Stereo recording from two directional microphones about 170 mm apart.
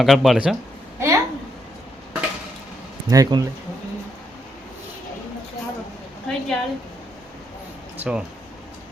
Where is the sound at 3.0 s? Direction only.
20° right (ahead or behind).